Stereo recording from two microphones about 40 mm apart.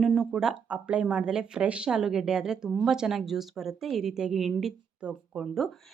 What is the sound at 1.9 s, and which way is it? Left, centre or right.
A woman's voice, centre.